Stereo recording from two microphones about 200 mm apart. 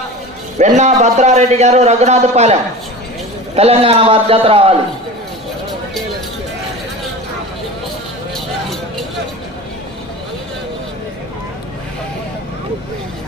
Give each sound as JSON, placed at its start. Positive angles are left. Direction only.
{"t": 0.8, "sound": "a man's voice", "side_deg": -35}